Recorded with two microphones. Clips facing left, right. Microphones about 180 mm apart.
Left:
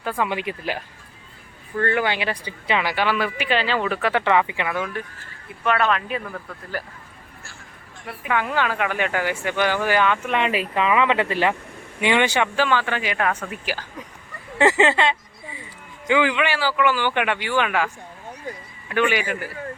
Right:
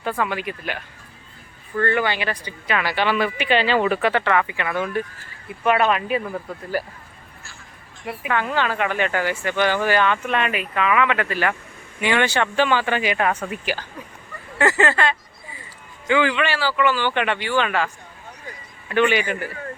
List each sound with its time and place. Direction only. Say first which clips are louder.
0.2 s speech: even; 20° left (ahead or behind)
1.7 s speech: right 1 dB; 5° left (ahead or behind)
2.6 s speech: left 1 dB; 20° left (ahead or behind)
2.9 s speech: right 2 dB; 5° left (ahead or behind)
4.1 s speech: left 1 dB; 15° left (ahead or behind)
5.6 s speech: right 2 dB; 10° right (ahead or behind)
8.3 s speech: even; 10° left (ahead or behind)
10.5 s speech: left 1 dB; 30° left (ahead or behind)
12.5 s speech: right 2 dB; 5° right (ahead or behind)
14.6 s speech: left 2 dB; 20° left (ahead or behind); by 19.5 s 5° left (ahead or behind)